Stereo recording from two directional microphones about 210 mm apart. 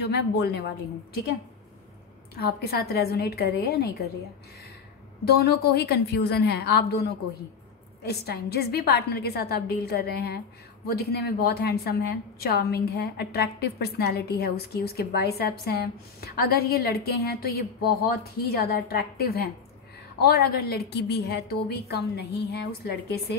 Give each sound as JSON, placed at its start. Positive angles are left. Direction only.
{"t": 0.0, "sound": "a woman's voice", "side_deg": 50}
{"t": 2.3, "sound": "a woman's voice", "side_deg": 50}
{"t": 5.4, "sound": "a woman's voice", "side_deg": 50}